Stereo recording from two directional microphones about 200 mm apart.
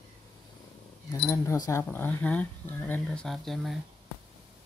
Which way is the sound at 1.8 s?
10° left (ahead or behind).